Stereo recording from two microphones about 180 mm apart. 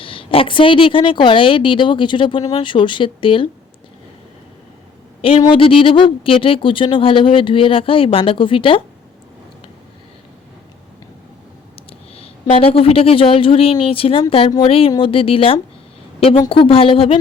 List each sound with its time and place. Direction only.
0.0 s a woman's voice: 30° left (ahead or behind)
5.5 s a woman's voice: 30° left (ahead or behind)
11.9 s a woman's voice: 30° left (ahead or behind)